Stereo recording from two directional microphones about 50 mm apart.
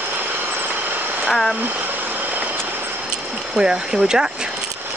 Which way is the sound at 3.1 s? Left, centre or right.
Centre.